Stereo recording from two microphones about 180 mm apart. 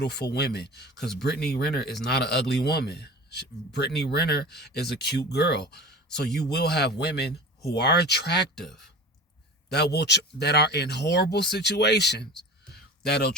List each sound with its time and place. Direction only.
0.0 s a man's voice: 65° left (ahead or behind)
8.5 s speech: centre (ahead or behind)
9.7 s speech: 65° left (ahead or behind)
12.7 s a sound: 65° left (ahead or behind)